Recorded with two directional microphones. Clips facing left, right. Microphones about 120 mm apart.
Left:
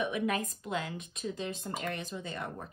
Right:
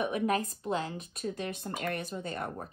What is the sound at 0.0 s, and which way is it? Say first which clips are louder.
A woman's voice: right 2 dB; 40° right (ahead or behind).